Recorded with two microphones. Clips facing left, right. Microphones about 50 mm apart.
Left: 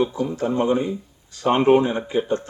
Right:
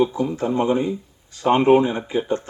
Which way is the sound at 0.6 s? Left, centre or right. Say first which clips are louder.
Even; centre.